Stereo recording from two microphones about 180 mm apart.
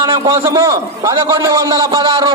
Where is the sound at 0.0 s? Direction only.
15° right (ahead or behind).